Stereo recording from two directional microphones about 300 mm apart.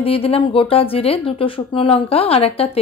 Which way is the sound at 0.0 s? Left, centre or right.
Centre.